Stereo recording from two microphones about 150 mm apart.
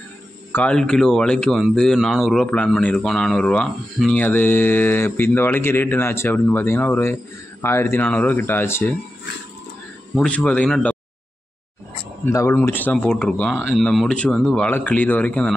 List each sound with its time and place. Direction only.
0.5 s a man's voice: 10° left (ahead or behind)
10.1 s a man's voice: 5° left (ahead or behind)
12.3 s a man's voice: 20° left (ahead or behind)